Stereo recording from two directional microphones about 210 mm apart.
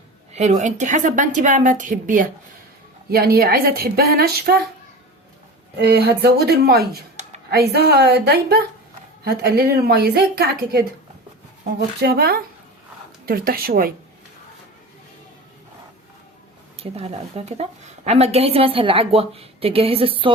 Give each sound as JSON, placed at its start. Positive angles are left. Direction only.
{"t": 0.3, "sound": "a woman's voice", "side_deg": -35}
{"t": 5.8, "sound": "a woman's voice", "side_deg": -50}
{"t": 12.0, "sound": "a woman's voice", "side_deg": -50}
{"t": 16.7, "sound": "a woman's voice", "side_deg": -30}